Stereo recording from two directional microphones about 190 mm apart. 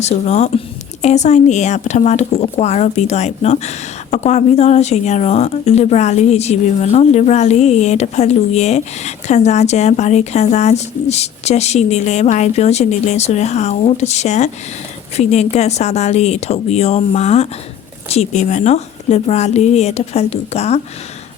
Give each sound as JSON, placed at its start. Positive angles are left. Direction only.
{"t": 0.0, "sound": "speech", "side_deg": 35}